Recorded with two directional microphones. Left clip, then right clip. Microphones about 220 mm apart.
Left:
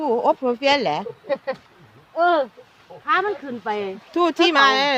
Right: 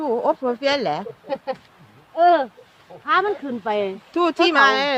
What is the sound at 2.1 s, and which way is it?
Speech, 25° right (ahead or behind).